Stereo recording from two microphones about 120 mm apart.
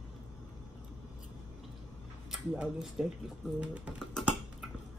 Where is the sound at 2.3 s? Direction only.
5° right (ahead or behind).